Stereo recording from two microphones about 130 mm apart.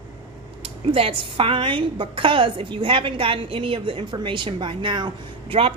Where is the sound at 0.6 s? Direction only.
45° right (ahead or behind).